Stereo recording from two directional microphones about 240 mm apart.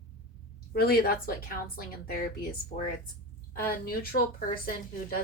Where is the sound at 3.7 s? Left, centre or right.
Left.